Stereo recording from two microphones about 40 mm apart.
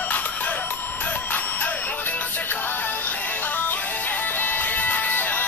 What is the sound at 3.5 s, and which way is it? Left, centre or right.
Music, left.